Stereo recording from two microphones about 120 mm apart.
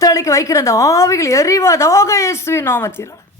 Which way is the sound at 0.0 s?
25° left (ahead or behind).